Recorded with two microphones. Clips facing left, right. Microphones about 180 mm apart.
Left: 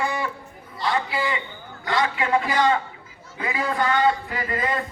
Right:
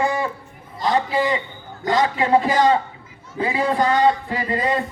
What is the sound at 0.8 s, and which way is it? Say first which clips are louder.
A man's voice: right 5 dB; 40° right (ahead or behind).